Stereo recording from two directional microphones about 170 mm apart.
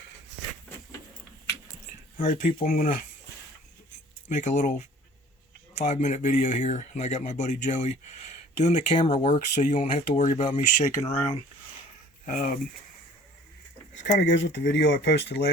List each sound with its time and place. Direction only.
2.1 s speech: 50° left (ahead or behind)
4.3 s speech: 45° left (ahead or behind)
12.2 s speech: 50° left (ahead or behind)
13.9 s speech: 85° left